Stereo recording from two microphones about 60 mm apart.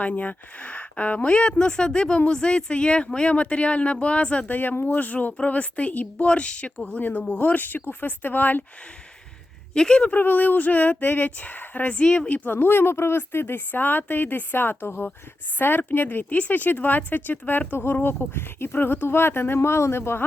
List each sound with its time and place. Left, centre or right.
0.0 s a woman's voice: left
9.7 s speech: centre
10.2 s a woman's voice: left
12.5 s speech: left